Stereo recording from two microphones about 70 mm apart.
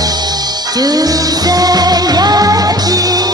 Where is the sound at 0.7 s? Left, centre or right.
Right.